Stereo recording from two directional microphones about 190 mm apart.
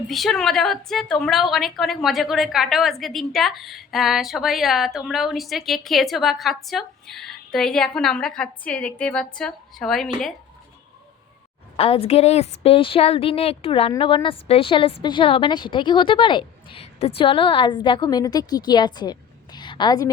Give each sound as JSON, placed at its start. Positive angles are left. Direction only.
{"t": 0.1, "sound": "a woman's voice", "side_deg": 0}
{"t": 11.8, "sound": "a woman's voice", "side_deg": 30}